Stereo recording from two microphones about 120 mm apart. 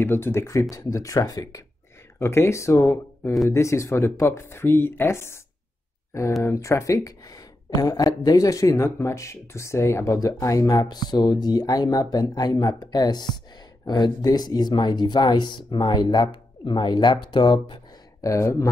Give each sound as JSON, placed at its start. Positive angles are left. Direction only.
{"t": 0.0, "sound": "speech", "side_deg": 20}
{"t": 6.4, "sound": "speech", "side_deg": 25}
{"t": 18.2, "sound": "speech", "side_deg": 25}